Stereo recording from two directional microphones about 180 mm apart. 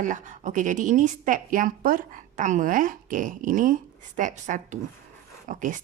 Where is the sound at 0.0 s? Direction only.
45° right (ahead or behind).